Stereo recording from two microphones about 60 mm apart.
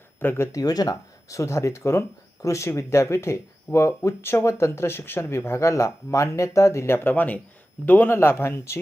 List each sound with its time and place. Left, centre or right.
0.2 s speech: left
0.5 s speech: left
5.5 s speech: left